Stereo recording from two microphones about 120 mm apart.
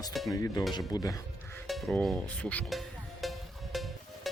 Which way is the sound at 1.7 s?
Centre (ahead or behind).